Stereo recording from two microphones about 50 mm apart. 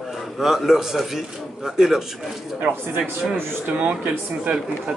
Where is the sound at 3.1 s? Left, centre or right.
Right.